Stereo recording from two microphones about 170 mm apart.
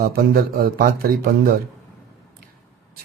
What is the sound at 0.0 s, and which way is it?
Speech, 60° right (ahead or behind).